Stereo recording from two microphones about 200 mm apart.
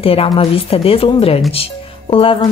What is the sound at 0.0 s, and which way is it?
Speech, 30° left (ahead or behind).